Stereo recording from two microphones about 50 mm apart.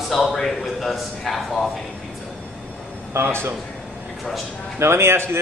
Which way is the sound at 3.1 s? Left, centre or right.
Right.